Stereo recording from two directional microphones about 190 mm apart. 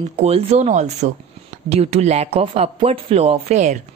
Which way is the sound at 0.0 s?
35° right (ahead or behind).